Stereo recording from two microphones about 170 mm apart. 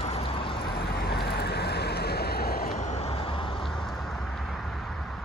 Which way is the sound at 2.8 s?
40° left (ahead or behind).